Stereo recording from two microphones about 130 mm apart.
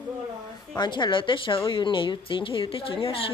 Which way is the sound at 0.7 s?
35° left (ahead or behind).